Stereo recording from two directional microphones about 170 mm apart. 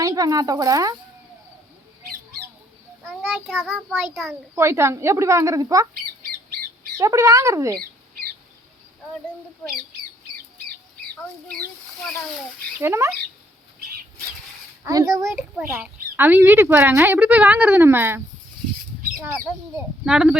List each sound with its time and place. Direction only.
0.0 s speech: 20° right (ahead or behind)
3.4 s a child's voice: 5° left (ahead or behind)
4.5 s speech: 15° right (ahead or behind)
7.0 s speech: 20° right (ahead or behind)
11.4 s speech: 5° left (ahead or behind)
12.8 s speech: 15° right (ahead or behind)
14.8 s speech: 20° right (ahead or behind)
15.4 s a child's voice: 5° right (ahead or behind)
19.7 s a child's voice: 5° right (ahead or behind)